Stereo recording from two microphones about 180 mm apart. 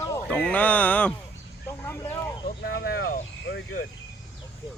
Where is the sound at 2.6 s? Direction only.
60° left (ahead or behind).